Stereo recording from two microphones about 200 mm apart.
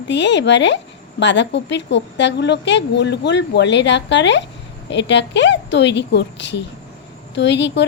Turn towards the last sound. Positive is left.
turn(degrees=60)  # may be behind; listen again after turning